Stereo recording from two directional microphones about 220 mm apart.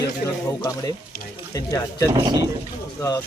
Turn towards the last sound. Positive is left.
turn(degrees=15)  # may be behind; listen again after turning